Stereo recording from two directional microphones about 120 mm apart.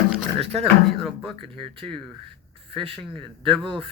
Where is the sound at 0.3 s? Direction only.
55° right (ahead or behind).